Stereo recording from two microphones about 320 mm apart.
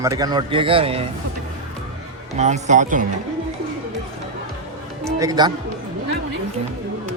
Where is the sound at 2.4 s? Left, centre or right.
Right.